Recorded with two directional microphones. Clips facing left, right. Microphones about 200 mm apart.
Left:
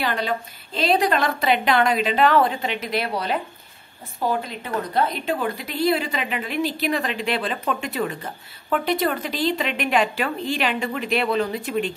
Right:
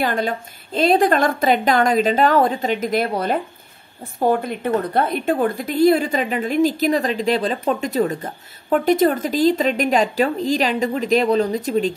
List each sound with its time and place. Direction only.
0.0 s a woman's voice: 50° right (ahead or behind)